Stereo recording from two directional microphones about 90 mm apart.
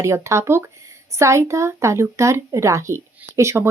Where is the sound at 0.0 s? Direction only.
30° right (ahead or behind).